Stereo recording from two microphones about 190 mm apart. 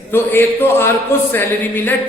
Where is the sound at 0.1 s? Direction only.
10° left (ahead or behind).